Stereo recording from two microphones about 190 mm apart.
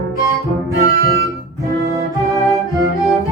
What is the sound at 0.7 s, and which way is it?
Music, 60° right (ahead or behind).